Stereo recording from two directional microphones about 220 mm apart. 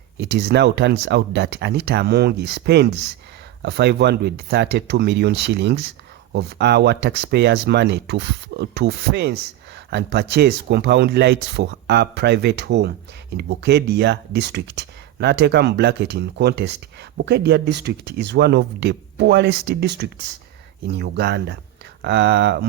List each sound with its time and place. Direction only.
0.2 s speech: 50° right (ahead or behind)